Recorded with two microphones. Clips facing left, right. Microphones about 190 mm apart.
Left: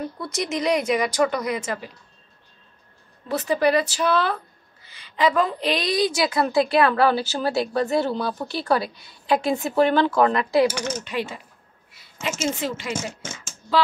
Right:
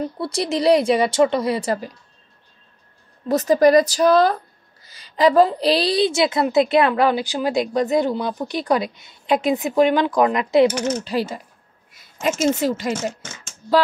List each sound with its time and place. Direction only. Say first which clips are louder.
0.2 s a woman's voice: right 5 dB; 30° right (ahead or behind)
3.3 s a woman's voice: right 6 dB; 40° right (ahead or behind); by 10.7 s 20° right (ahead or behind)
11.1 s a woman's voice: right 5 dB; 35° right (ahead or behind)